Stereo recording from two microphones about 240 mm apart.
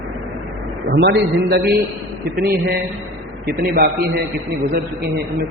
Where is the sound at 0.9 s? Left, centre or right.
Right.